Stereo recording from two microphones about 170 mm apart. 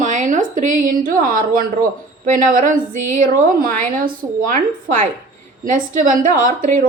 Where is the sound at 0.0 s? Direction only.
45° right (ahead or behind).